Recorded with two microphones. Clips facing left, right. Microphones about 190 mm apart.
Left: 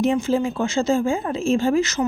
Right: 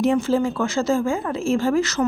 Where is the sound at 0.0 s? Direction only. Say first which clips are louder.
Right 1 dB; 20° left (ahead or behind).